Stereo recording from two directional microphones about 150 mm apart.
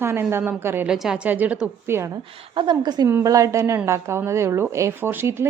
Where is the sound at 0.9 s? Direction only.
5° right (ahead or behind).